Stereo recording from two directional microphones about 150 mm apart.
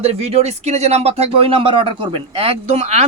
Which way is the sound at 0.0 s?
45° right (ahead or behind).